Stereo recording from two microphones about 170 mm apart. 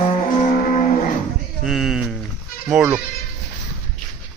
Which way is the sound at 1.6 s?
Centre (ahead or behind).